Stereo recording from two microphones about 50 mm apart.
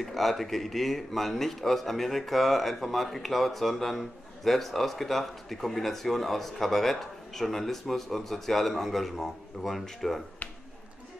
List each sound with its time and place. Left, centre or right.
0.0 s speech: centre